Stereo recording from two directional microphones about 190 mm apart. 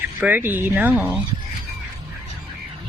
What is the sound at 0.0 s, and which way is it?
Speech, 10° right (ahead or behind).